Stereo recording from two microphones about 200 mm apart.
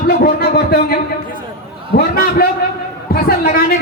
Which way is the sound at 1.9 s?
50° left (ahead or behind).